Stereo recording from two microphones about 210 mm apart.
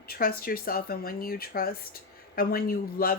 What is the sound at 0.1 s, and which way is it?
Speech, 45° left (ahead or behind).